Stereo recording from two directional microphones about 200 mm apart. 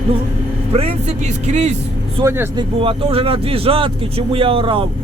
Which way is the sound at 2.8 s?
25° right (ahead or behind).